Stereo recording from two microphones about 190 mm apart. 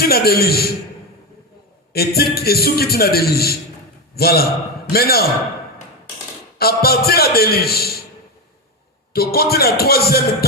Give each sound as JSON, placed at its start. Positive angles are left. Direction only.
{"t": 0.0, "sound": "a man's voice", "side_deg": 55}
{"t": 1.9, "sound": "a man's voice", "side_deg": 55}
{"t": 6.6, "sound": "a man's voice", "side_deg": 55}
{"t": 9.1, "sound": "a man's voice", "side_deg": 55}